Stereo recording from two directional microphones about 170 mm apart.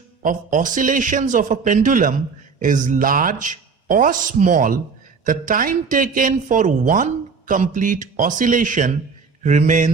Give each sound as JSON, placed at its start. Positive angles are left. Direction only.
{"t": 0.2, "sound": "speech", "side_deg": -50}